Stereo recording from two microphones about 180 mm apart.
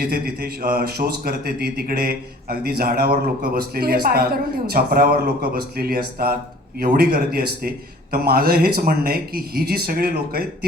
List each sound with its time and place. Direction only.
0.0 s speech: 60° right (ahead or behind)